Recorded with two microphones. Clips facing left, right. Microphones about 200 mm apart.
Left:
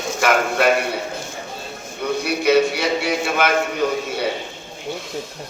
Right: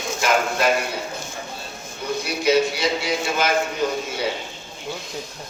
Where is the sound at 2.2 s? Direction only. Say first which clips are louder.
Left 3 dB; 60° left (ahead or behind).